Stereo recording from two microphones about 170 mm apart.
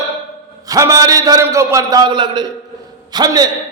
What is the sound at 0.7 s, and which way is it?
A man's voice, 20° right (ahead or behind).